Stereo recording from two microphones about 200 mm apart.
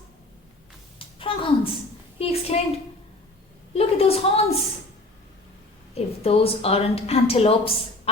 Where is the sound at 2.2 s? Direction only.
30° left (ahead or behind).